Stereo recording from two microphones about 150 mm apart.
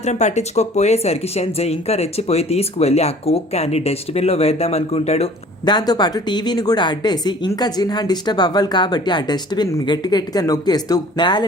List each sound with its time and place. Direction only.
0.0 s speech: 50° left (ahead or behind)
5.6 s speech: 25° left (ahead or behind)